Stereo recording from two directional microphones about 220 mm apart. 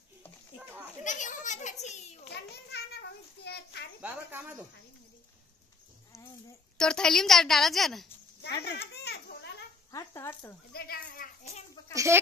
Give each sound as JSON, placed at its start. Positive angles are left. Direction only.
{"t": 0.6, "sound": "children playing", "side_deg": -10}
{"t": 1.0, "sound": "children playing", "side_deg": 35}
{"t": 2.2, "sound": "children playing", "side_deg": 50}
{"t": 4.0, "sound": "snake", "side_deg": -5}
{"t": 6.8, "sound": "a woman's voice", "side_deg": 5}
{"t": 8.6, "sound": "baby laughter", "side_deg": 50}
{"t": 9.8, "sound": "speech", "side_deg": 15}
{"t": 10.7, "sound": "speech", "side_deg": 45}
{"t": 11.9, "sound": "speech", "side_deg": -15}